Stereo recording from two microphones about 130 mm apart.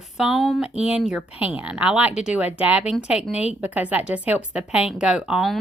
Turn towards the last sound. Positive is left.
turn(degrees=-5)  # may be behind; listen again after turning